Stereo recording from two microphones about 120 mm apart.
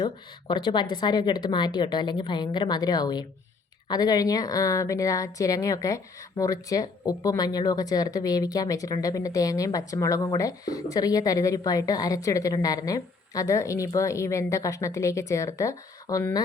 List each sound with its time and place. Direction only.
0.0 s speech: 40° left (ahead or behind)